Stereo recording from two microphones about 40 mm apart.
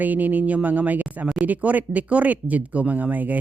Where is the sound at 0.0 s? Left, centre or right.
Right.